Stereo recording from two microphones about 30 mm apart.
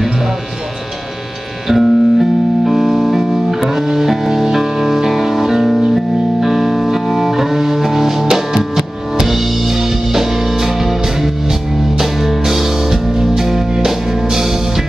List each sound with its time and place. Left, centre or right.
1.7 s music: centre